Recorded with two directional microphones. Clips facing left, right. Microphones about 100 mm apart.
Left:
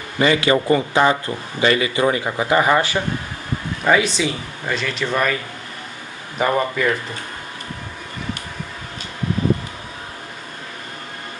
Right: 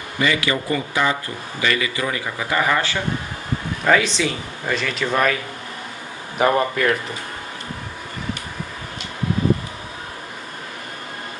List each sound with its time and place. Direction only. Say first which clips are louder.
0.2 s a man's voice: left 5 dB; 35° left (ahead or behind)
3.8 s speech: left 1 dB; 5° left (ahead or behind)